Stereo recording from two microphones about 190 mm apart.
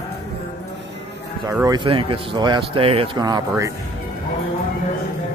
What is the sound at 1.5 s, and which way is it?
Speech, 20° right (ahead or behind).